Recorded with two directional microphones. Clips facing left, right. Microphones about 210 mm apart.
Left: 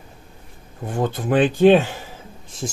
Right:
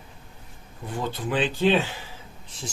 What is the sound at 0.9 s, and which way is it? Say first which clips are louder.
Speech: left 7 dB; 50° left (ahead or behind).